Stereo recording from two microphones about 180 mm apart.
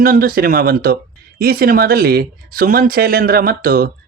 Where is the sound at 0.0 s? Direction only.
50° right (ahead or behind).